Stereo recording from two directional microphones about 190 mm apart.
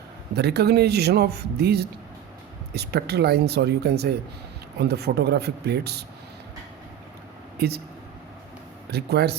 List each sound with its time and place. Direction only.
0.3 s a man's voice: 60° right (ahead or behind)
8.9 s a man's voice: 60° right (ahead or behind)